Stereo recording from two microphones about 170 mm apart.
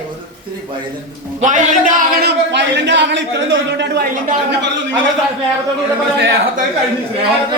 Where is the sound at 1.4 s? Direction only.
50° right (ahead or behind); by 4.9 s 90° right.